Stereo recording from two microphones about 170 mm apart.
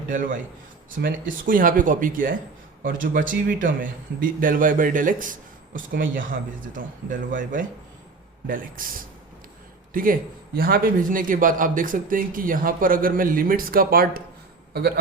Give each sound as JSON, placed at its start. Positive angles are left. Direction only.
{"t": 0.1, "sound": "speech", "side_deg": -50}
{"t": 9.9, "sound": "a man's voice", "side_deg": -55}